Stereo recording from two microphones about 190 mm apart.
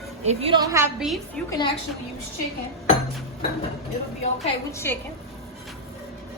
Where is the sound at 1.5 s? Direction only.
25° left (ahead or behind).